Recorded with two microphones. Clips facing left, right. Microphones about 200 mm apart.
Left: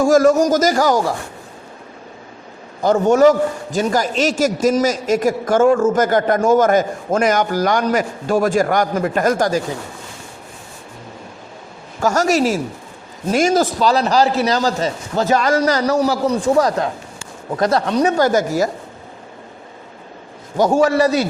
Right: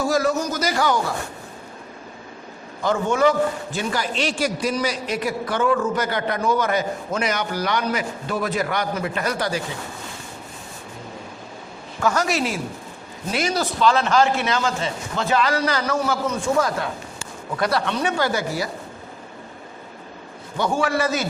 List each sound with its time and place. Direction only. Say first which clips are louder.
0.0 s a man's voice: left 9 dB; 45° left (ahead or behind)
2.8 s a man's voice: left 7 dB; 40° left (ahead or behind)
11.9 s a man's voice: left 6 dB; 40° left (ahead or behind)
20.6 s a man's voice: left 8 dB; 40° left (ahead or behind)